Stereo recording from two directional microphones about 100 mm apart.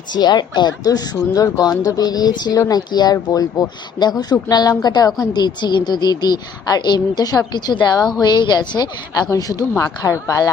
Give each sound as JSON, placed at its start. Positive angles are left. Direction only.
{"t": 0.1, "sound": "a woman's voice", "side_deg": 45}
{"t": 9.3, "sound": "speech", "side_deg": 30}